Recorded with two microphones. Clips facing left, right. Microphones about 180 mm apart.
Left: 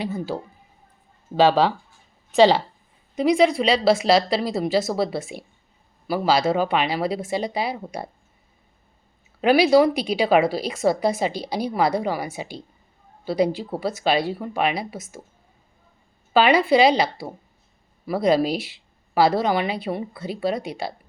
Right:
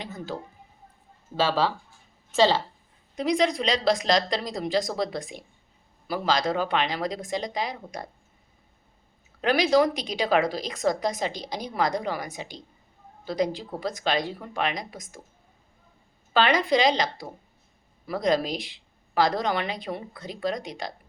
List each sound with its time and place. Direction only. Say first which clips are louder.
0.0 s a woman's voice: left 8 dB; 10° left (ahead or behind)
1.4 s a woman's voice: left 7 dB; 15° left (ahead or behind)
9.4 s a woman's voice: left 5 dB; 10° left (ahead or behind)
16.3 s a woman's voice: left 5 dB; 10° left (ahead or behind)